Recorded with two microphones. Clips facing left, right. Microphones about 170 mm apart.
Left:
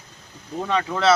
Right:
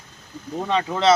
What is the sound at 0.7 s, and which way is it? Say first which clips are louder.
Speech: right 1 dB; 20° right (ahead or behind).